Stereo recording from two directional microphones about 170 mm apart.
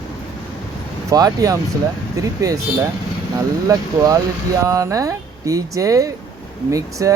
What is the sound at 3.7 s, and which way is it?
Speech, 20° right (ahead or behind).